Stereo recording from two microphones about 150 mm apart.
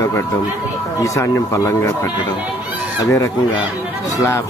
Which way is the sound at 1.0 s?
20° left (ahead or behind).